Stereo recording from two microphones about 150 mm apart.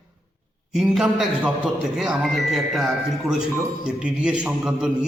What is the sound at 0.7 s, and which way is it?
A man's voice, centre (ahead or behind).